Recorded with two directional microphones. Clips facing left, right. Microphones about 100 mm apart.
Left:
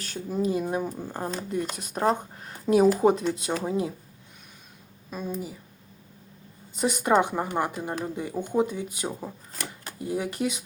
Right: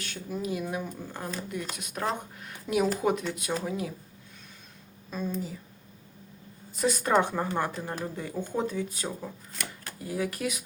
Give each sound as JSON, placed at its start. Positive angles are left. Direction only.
{"t": 0.0, "sound": "speech", "side_deg": 35}
{"t": 5.1, "sound": "speech", "side_deg": 10}
{"t": 6.7, "sound": "speech", "side_deg": 20}